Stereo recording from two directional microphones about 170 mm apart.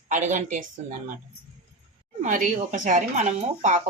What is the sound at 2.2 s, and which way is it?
Speech, 50° right (ahead or behind).